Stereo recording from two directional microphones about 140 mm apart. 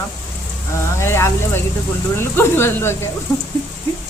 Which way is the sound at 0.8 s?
20° left (ahead or behind).